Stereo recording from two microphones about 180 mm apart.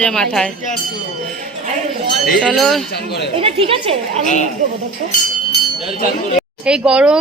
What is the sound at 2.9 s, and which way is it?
Speech, 65° left (ahead or behind).